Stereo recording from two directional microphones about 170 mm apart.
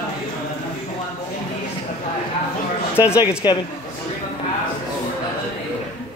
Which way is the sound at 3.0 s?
20° left (ahead or behind).